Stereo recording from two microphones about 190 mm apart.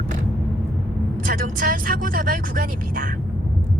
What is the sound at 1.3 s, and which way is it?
Speech, 50° right (ahead or behind).